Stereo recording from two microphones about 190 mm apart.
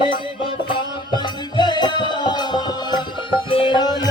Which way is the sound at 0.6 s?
25° left (ahead or behind).